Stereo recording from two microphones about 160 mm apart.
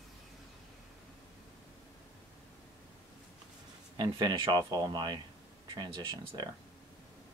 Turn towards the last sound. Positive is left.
turn(degrees=-25)  # may be behind; listen again after turning